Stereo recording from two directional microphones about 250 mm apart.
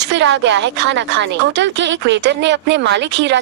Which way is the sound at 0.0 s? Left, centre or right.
Right.